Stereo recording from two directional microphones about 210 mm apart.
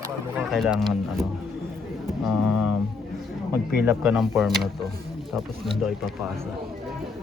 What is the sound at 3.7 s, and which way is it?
Speech, centre (ahead or behind).